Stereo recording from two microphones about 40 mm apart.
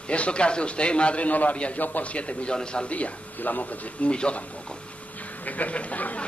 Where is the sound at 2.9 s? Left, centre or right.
Left.